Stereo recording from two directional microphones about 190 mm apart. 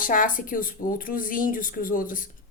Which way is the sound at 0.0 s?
45° left (ahead or behind).